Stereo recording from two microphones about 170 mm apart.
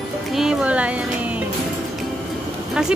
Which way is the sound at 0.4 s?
5° right (ahead or behind).